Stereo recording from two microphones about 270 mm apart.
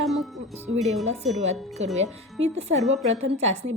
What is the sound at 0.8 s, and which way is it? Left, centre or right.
Speech, centre.